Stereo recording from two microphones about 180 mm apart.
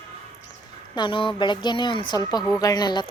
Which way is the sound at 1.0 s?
30° left (ahead or behind).